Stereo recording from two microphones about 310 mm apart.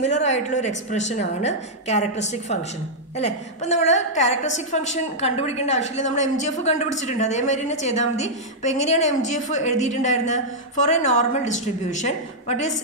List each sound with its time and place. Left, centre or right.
0.0 s a woman's voice: left
3.2 s a woman's voice: left